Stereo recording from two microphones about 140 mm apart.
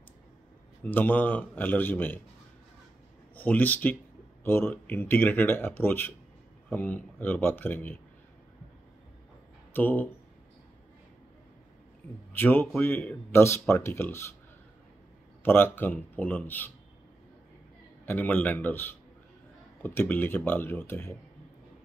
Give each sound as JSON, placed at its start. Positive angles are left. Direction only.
{"t": 0.8, "sound": "speech", "side_deg": 15}
{"t": 3.3, "sound": "speech", "side_deg": 10}
{"t": 9.7, "sound": "speech", "side_deg": 15}
{"t": 12.3, "sound": "speech", "side_deg": 15}
{"t": 15.4, "sound": "speech", "side_deg": 15}
{"t": 18.0, "sound": "speech", "side_deg": 10}